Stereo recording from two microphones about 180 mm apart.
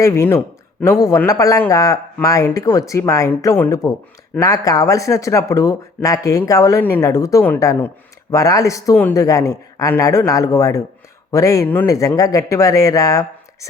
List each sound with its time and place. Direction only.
0.0 s speech: 15° left (ahead or behind)